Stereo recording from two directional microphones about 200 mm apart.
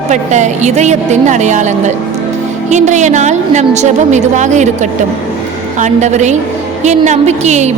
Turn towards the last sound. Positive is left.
turn(degrees=-35)  # may be behind; listen again after turning